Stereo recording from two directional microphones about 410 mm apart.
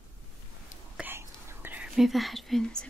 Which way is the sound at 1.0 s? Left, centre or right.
Centre.